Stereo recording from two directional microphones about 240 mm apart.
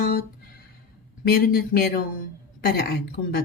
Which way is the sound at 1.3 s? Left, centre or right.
Left.